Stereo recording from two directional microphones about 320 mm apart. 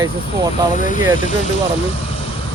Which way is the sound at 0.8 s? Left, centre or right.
Left.